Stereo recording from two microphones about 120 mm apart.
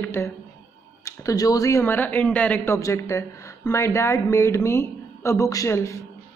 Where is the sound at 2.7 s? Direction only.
25° left (ahead or behind).